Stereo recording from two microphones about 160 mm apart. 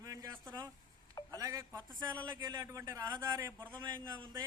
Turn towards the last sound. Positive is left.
turn(degrees=-25)  # may be behind; listen again after turning